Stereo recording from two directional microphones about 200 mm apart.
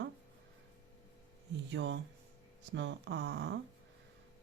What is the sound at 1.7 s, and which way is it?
Speech, 65° right (ahead or behind).